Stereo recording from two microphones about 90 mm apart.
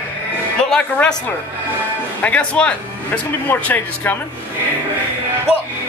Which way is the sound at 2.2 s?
15° left (ahead or behind).